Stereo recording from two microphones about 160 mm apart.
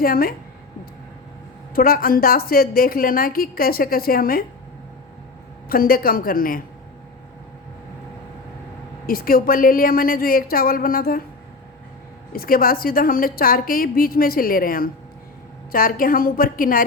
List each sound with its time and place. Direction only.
0.0 s a woman's voice: 65° left (ahead or behind)
1.7 s a woman's voice: 65° left (ahead or behind)
5.6 s a woman's voice: 65° left (ahead or behind)
9.0 s a woman's voice: 65° left (ahead or behind)
12.3 s a woman's voice: 65° left (ahead or behind)